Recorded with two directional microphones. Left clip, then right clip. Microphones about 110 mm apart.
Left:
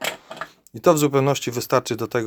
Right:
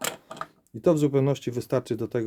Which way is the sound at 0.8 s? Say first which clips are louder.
Left 5 dB; 20° right (ahead or behind).